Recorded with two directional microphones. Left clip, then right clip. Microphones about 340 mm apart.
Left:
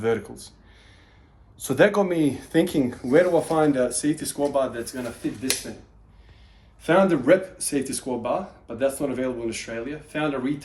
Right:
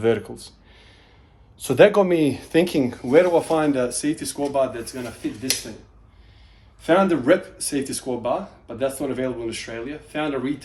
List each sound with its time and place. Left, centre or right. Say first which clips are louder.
0.0 s speech: right 3 dB; right
1.6 s speech: right 4 dB; right; by 4.9 s centre
6.8 s speech: right 1 dB; centre